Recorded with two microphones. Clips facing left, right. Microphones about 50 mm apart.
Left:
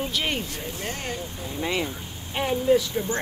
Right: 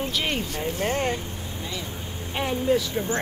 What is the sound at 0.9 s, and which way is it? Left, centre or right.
Speech, right.